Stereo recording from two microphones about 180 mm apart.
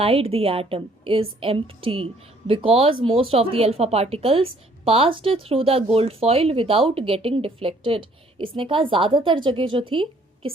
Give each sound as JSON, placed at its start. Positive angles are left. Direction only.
{"t": 0.0, "sound": "a woman's voice", "side_deg": -30}